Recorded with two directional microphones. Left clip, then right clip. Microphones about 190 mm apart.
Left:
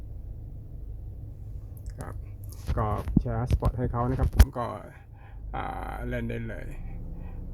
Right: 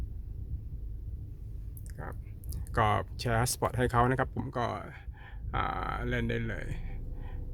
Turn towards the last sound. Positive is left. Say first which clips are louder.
# left 2 dB
turn(degrees=-10)  # may be behind; listen again after turning